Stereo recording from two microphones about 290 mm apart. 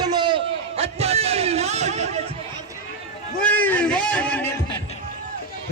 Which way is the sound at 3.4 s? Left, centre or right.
Centre.